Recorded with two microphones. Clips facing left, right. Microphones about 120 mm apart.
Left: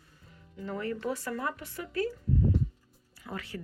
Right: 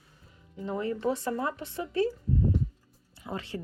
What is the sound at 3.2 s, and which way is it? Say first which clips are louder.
Speech: right 3 dB; 25° right (ahead or behind).